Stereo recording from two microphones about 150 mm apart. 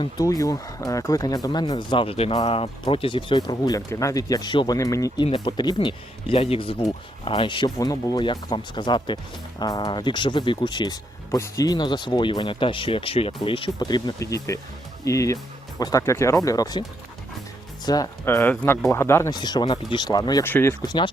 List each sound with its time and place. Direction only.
0.0 s speech: 25° left (ahead or behind)
5.2 s speech: 35° left (ahead or behind)
17.8 s speech: 25° left (ahead or behind)
19.3 s speech: 30° left (ahead or behind)
20.4 s speech: 15° left (ahead or behind)
20.8 s speech: 30° left (ahead or behind)